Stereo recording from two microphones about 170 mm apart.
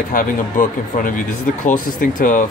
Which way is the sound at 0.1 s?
55° left (ahead or behind).